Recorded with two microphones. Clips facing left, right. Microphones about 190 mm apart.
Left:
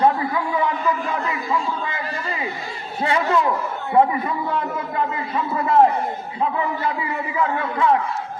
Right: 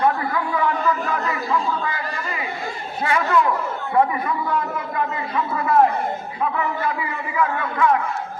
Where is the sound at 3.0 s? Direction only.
25° left (ahead or behind).